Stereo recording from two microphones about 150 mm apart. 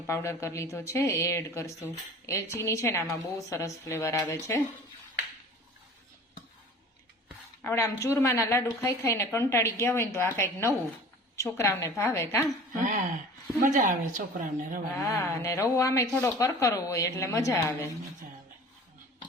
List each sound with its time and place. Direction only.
0.1 s a woman's voice: 20° left (ahead or behind)
7.6 s a woman's voice: 15° left (ahead or behind)
13.6 s a woman's voice: 60° right (ahead or behind)
14.9 s a woman's voice: 20° left (ahead or behind)